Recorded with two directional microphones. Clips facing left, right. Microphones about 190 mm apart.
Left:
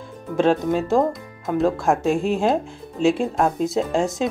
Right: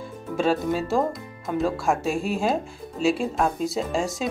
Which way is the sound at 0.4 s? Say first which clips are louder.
Left 4 dB; 20° left (ahead or behind).